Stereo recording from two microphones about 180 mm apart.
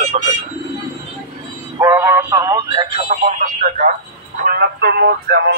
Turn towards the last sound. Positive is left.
turn(degrees=-60)  # may be behind; listen again after turning